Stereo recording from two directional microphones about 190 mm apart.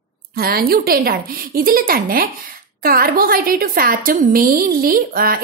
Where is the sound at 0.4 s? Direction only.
50° right (ahead or behind).